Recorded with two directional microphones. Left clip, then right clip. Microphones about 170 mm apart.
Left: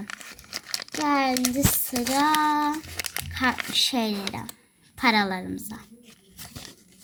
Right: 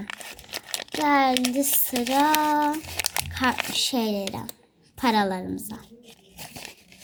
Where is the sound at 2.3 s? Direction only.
Centre (ahead or behind).